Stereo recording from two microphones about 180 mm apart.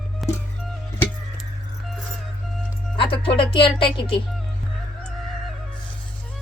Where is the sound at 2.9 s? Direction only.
30° left (ahead or behind).